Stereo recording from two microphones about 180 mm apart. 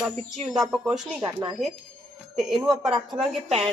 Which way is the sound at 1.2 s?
20° right (ahead or behind).